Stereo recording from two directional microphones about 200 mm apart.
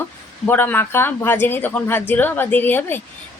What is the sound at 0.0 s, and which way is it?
Speech, 10° left (ahead or behind).